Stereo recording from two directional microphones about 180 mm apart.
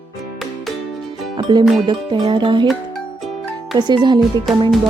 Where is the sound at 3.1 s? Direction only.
Centre (ahead or behind).